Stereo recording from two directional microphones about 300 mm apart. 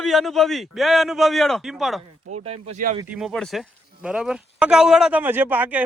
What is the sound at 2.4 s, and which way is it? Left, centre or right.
Speech, centre.